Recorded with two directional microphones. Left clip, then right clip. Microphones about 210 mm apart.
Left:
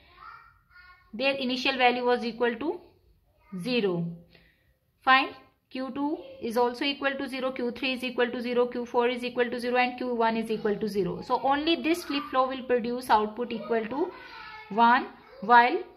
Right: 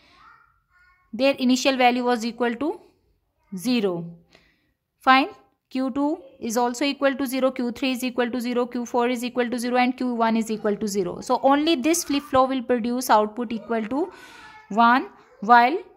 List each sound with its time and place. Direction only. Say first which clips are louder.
1.1 s a woman's voice: right 6 dB; 50° right (ahead or behind)